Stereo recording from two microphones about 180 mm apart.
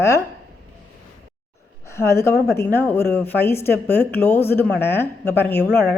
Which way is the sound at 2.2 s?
15° left (ahead or behind).